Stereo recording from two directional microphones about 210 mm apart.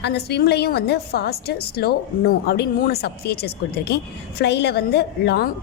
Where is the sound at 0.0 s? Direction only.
50° left (ahead or behind).